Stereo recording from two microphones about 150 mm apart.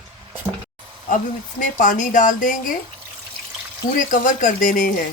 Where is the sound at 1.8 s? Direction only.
60° left (ahead or behind).